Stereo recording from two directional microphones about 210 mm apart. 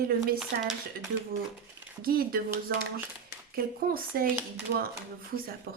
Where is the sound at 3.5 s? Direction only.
45° right (ahead or behind).